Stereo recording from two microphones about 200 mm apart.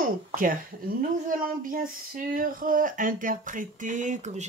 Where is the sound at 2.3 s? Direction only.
45° right (ahead or behind).